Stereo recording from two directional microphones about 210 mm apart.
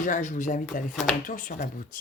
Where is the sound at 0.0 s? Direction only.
35° left (ahead or behind).